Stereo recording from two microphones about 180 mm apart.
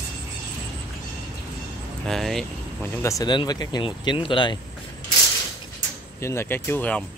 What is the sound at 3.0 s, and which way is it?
Speech, 20° left (ahead or behind).